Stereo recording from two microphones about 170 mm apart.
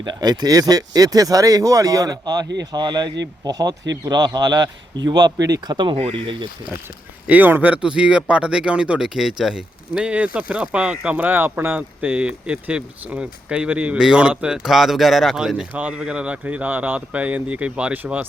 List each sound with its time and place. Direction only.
0.0 s speech: 25° right (ahead or behind)
7.3 s speech: 10° right (ahead or behind)